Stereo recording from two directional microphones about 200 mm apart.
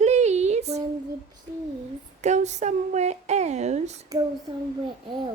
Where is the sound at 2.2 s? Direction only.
35° right (ahead or behind).